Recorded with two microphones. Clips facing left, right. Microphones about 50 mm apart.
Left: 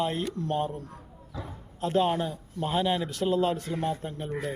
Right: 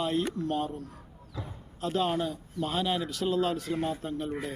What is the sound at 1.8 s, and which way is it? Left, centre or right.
A man's voice, left.